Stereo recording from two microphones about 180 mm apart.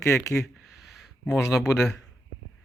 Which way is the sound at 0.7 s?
Centre (ahead or behind).